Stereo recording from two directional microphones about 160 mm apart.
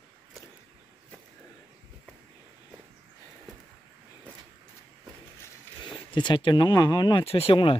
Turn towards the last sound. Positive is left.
turn(degrees=35)  # may be behind; listen again after turning